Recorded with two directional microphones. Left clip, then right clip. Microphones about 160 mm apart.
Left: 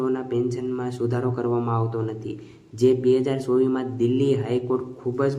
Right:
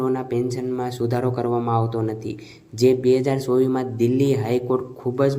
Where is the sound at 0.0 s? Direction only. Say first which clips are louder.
Right 1 dB; 20° right (ahead or behind).